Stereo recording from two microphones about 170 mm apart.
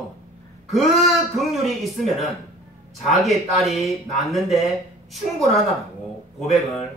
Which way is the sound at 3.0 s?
Centre (ahead or behind).